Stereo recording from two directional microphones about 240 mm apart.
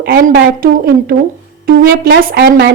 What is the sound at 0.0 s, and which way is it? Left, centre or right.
Speech, right.